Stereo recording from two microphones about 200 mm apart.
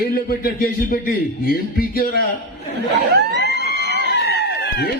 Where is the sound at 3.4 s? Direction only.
55° left (ahead or behind).